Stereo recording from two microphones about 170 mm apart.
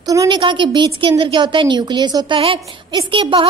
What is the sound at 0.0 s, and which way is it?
A woman's voice, 20° right (ahead or behind).